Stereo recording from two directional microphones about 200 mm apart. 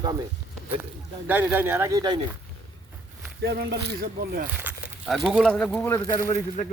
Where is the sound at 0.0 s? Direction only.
20° right (ahead or behind).